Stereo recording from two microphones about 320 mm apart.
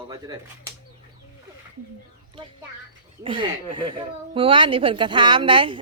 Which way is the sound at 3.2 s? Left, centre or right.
Centre.